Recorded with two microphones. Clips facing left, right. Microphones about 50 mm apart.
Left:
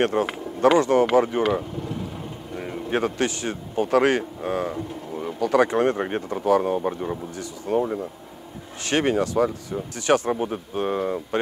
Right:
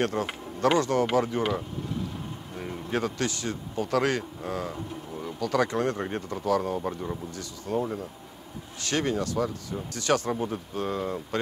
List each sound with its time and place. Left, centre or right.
0.0 s speech: left
2.5 s a man's voice: left
8.8 s speech: left